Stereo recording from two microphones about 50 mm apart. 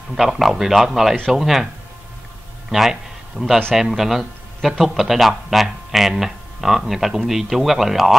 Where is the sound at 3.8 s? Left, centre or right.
Centre.